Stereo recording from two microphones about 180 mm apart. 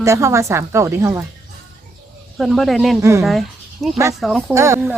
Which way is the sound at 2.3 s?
Centre (ahead or behind).